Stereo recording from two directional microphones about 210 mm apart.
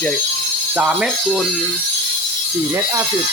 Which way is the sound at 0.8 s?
5° right (ahead or behind).